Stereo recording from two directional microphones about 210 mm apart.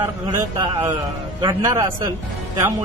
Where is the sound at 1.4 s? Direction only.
15° right (ahead or behind).